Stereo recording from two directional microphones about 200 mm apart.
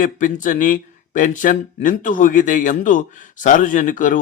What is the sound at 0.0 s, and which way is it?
Speech, 40° left (ahead or behind).